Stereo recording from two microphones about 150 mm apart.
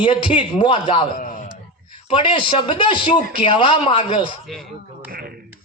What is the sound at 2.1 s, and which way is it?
Speech, 35° left (ahead or behind).